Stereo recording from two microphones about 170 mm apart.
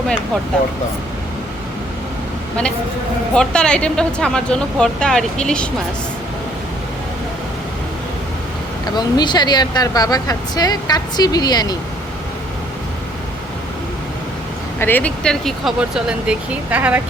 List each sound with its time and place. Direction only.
3.3 s speech: 5° left (ahead or behind)
9.0 s speech: 25° left (ahead or behind)
14.8 s speech: 10° left (ahead or behind); by 17.0 s 10° right (ahead or behind)